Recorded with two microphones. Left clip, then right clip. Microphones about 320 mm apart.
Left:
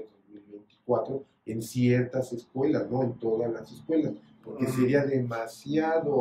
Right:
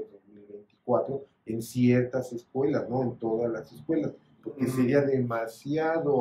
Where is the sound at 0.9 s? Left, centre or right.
Centre.